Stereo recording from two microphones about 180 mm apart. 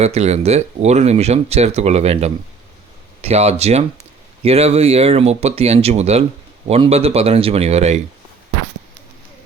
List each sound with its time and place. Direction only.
0.0 s speech: 35° right (ahead or behind)